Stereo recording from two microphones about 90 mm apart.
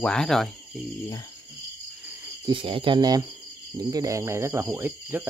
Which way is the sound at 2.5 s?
85° right.